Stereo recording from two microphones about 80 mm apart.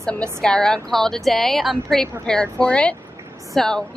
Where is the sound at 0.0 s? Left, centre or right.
Centre.